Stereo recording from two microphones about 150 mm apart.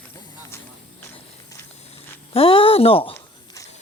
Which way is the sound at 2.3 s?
40° left (ahead or behind).